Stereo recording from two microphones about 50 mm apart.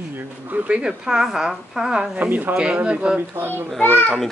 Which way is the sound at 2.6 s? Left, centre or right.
Right.